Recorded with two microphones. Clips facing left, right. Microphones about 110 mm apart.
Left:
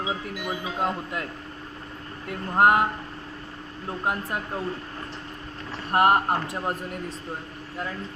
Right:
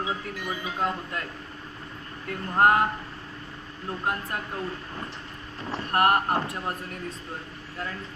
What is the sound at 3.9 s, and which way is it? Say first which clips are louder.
Speech: left 2 dB; 20° left (ahead or behind).